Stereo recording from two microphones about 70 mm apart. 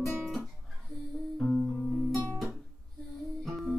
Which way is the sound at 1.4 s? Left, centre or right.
Centre.